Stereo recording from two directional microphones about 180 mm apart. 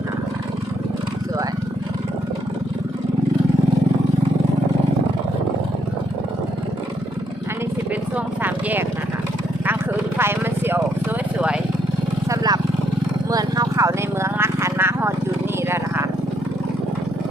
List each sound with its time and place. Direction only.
8.4 s vehicle: 10° right (ahead or behind)
10.2 s vehicle: 15° right (ahead or behind)
12.3 s vehicle: 20° right (ahead or behind)